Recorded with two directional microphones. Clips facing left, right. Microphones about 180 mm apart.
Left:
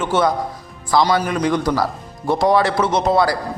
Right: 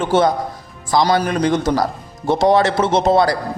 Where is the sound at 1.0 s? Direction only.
40° right (ahead or behind).